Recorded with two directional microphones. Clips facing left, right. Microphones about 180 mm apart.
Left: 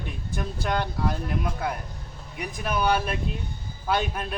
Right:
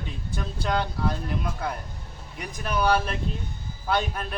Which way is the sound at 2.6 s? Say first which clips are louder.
Right 1 dB; 5° left (ahead or behind).